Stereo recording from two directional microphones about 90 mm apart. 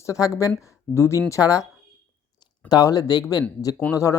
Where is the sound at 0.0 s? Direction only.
35° left (ahead or behind).